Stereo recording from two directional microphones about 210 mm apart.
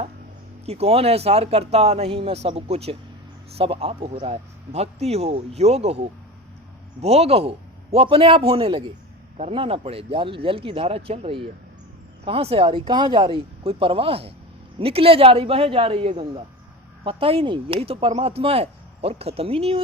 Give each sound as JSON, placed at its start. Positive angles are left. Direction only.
{"t": 0.6, "sound": "speech", "side_deg": -30}